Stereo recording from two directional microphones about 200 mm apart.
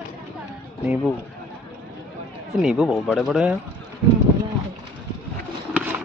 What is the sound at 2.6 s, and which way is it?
Speech, centre (ahead or behind).